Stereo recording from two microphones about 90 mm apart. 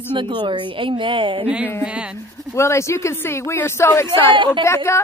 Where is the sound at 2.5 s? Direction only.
35° left (ahead or behind).